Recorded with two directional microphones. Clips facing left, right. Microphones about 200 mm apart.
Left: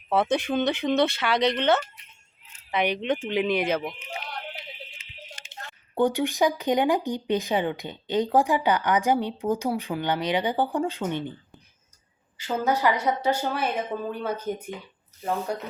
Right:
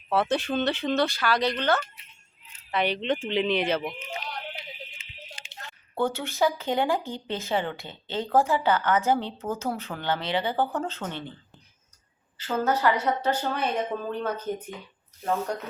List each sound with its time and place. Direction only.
0.1 s speech: 15° left (ahead or behind)
5.9 s speech: 15° left (ahead or behind)